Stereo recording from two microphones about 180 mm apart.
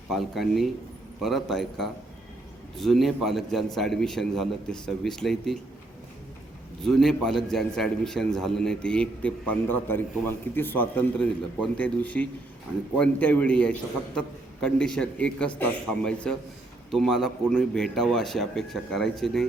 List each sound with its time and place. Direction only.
0.1 s a man's voice: centre (ahead or behind)
6.8 s a man's voice: centre (ahead or behind)